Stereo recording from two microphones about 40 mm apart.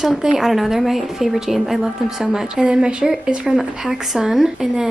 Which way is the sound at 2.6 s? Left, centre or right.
Right.